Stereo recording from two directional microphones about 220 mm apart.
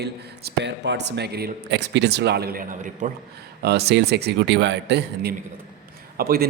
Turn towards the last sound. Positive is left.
turn(degrees=-40)  # may be behind; listen again after turning